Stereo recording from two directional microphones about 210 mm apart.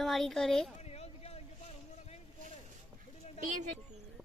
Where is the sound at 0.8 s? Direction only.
30° left (ahead or behind).